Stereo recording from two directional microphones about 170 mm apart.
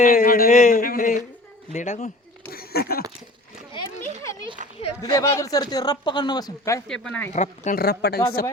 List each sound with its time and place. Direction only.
0.0 s speech: 55° left (ahead or behind)
2.5 s a sound: 65° left (ahead or behind)
4.6 s speech: 50° right (ahead or behind)
5.0 s speech: 20° left (ahead or behind)
6.8 s speech: 5° left (ahead or behind)
7.3 s speech: 45° left (ahead or behind)
7.8 s speech: 65° left (ahead or behind)